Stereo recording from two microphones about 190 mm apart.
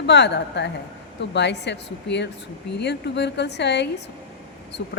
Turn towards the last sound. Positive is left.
turn(degrees=65)  # may be behind; listen again after turning